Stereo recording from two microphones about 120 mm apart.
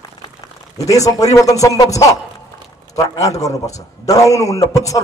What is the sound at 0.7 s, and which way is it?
A man's voice, 30° left (ahead or behind).